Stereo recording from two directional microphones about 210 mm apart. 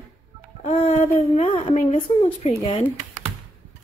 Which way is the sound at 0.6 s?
30° left (ahead or behind).